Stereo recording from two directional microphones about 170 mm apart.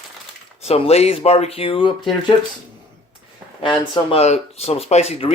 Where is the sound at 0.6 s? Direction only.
35° left (ahead or behind).